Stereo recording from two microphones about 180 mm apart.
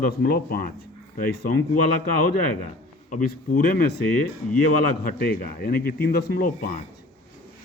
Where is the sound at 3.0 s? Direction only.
50° left (ahead or behind).